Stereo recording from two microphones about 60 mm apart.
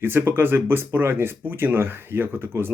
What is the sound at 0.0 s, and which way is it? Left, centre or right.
Speech, right.